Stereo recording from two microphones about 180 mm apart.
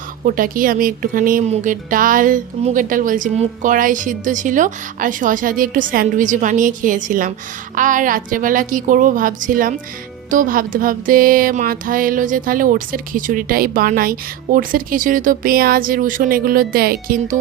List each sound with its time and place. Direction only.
0.3 s a woman's voice: 50° right (ahead or behind)